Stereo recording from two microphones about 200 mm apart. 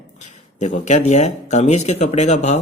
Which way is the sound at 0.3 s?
35° left (ahead or behind).